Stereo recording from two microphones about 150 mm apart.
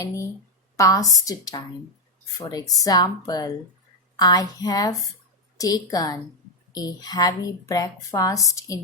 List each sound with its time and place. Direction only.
0.8 s a woman's voice: 20° left (ahead or behind)